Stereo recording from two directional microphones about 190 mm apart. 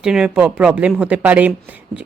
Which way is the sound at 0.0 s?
5° right (ahead or behind).